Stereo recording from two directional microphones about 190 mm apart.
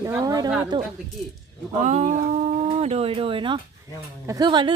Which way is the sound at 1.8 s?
40° right (ahead or behind).